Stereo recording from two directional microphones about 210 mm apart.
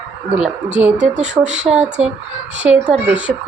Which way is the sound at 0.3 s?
5° right (ahead or behind).